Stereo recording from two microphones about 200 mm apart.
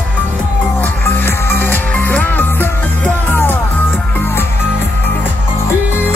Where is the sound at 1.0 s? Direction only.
10° left (ahead or behind).